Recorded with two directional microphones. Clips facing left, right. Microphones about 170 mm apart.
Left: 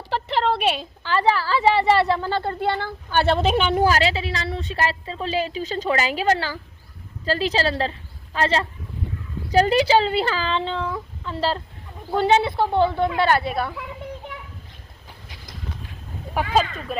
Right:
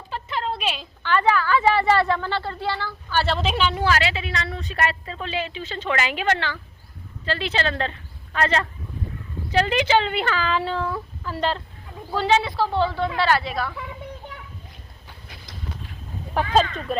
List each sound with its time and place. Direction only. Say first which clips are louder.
0.1 s a sound: left 6 dB; 70° left (ahead or behind)
1.0 s a woman's voice: even; 30° left (ahead or behind)
2.4 s a woman's voice: left 4 dB; 50° left (ahead or behind); by 10.8 s 25° left (ahead or behind)
10.8 s a sound: even; 5° right (ahead or behind)
11.3 s a woman's voice: left 1 dB; 30° left (ahead or behind)
12.5 s a woman's voice: left 3 dB; 20° left (ahead or behind)
16.3 s speech: right 1 dB; 10° left (ahead or behind)